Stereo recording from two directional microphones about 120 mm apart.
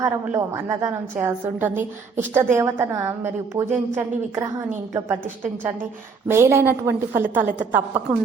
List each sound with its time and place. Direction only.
0.0 s a woman's voice: 25° right (ahead or behind)
6.2 s a woman's voice: 20° right (ahead or behind)